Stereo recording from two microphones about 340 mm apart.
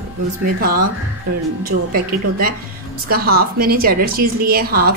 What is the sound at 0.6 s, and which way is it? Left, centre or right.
Speech, right.